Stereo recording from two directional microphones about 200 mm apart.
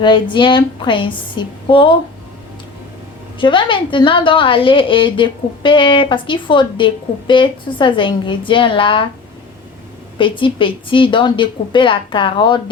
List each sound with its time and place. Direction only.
0.0 s a woman's voice: 25° left (ahead or behind)
3.3 s a woman's voice: 25° left (ahead or behind)
10.2 s a woman's voice: 25° left (ahead or behind)